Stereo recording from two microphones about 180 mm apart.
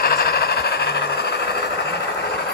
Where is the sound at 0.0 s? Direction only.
60° left (ahead or behind).